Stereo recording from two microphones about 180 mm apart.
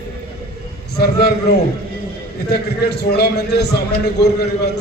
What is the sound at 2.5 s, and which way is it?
A man's voice, 65° left (ahead or behind).